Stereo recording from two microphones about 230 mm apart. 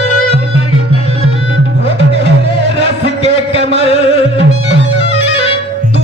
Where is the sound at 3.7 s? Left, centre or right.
Left.